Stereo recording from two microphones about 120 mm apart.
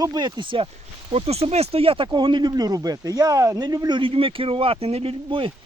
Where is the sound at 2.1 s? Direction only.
40° right (ahead or behind).